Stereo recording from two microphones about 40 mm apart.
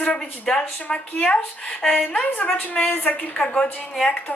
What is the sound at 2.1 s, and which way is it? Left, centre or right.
Speech, left.